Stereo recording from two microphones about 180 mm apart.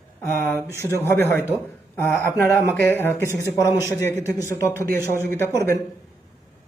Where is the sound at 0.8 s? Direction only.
15° left (ahead or behind).